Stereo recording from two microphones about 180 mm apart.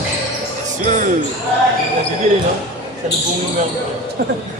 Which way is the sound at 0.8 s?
45° right (ahead or behind).